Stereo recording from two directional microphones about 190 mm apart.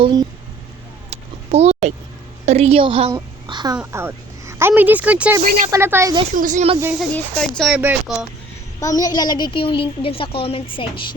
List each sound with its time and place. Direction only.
0.0 s speech: 20° right (ahead or behind)
1.1 s a sound: 35° right (ahead or behind)
2.5 s a woman's voice: 35° right (ahead or behind)
3.8 s a woman's voice: 10° right (ahead or behind)
5.4 s speech: 45° right (ahead or behind)
5.7 s speech: 15° right (ahead or behind)
6.3 s speech: 45° right (ahead or behind)
7.0 s speech: 5° left (ahead or behind)
8.8 s a woman's voice: 20° left (ahead or behind)